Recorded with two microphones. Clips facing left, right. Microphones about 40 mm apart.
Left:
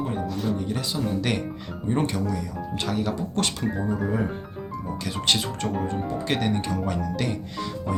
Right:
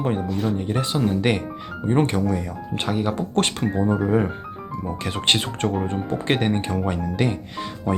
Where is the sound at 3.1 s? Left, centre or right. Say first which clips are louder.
Right 4 dB; right.